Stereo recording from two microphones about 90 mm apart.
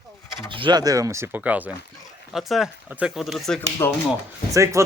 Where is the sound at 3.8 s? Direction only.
35° left (ahead or behind).